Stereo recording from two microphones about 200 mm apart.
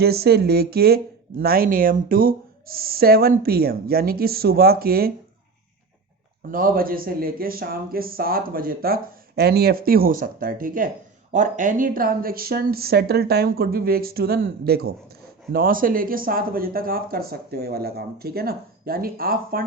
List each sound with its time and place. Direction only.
0.0 s a man's voice: 55° right (ahead or behind)
6.5 s a man's voice: 45° right (ahead or behind)